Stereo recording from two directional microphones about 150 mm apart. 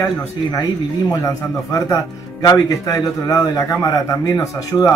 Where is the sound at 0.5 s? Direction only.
25° left (ahead or behind).